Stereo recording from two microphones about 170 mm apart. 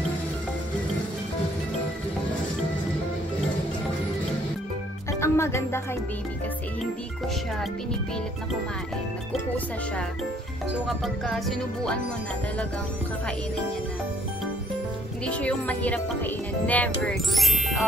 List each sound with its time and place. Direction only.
5.2 s music: 15° left (ahead or behind)
10.9 s music: centre (ahead or behind)
15.2 s speech: 10° left (ahead or behind)